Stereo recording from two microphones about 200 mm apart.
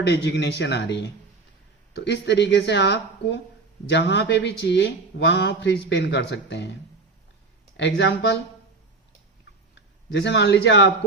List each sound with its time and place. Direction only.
0.0 s speech: 60° left (ahead or behind)
7.8 s speech: 60° left (ahead or behind)
10.1 s speech: 60° left (ahead or behind)